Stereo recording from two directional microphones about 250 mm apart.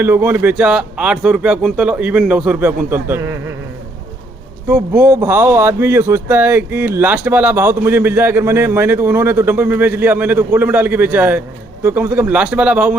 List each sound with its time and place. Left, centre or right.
0.0 s speech: centre
4.7 s speech: centre